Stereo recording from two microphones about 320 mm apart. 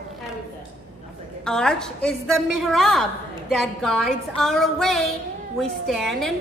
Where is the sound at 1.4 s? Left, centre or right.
Centre.